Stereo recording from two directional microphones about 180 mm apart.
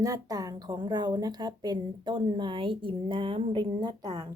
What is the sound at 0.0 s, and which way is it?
A woman's voice, 20° right (ahead or behind).